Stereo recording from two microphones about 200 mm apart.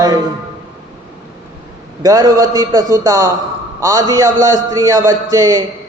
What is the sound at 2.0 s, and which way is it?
A man's voice, 15° right (ahead or behind).